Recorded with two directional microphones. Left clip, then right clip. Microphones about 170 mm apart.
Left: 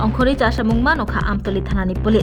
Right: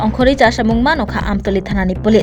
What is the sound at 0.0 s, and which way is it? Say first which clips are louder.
A woman's voice: right 6 dB; 20° right (ahead or behind).